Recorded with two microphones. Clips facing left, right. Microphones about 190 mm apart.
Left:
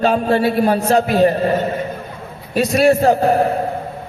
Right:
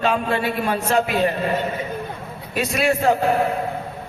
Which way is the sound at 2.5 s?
35° left (ahead or behind).